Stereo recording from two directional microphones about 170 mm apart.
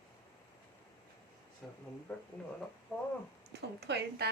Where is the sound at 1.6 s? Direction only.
Centre (ahead or behind).